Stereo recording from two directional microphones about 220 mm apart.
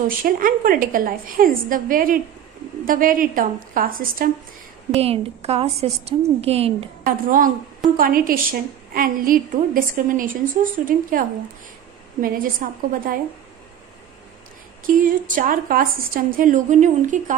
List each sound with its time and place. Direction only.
0.2 s a woman's voice: 40° right (ahead or behind)
4.9 s a woman's voice: 30° right (ahead or behind)
15.0 s a woman's voice: 40° right (ahead or behind)